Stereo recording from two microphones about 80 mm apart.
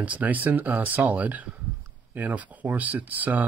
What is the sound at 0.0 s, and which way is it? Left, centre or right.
Speech, centre.